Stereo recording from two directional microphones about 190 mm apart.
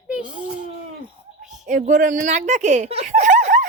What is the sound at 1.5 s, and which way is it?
Speech, 40° right (ahead or behind).